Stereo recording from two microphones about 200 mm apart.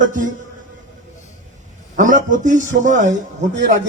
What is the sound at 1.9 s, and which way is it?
A man's voice, 40° right (ahead or behind).